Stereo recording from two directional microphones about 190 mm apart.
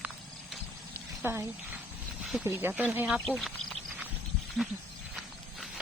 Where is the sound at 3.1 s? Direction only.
5° left (ahead or behind).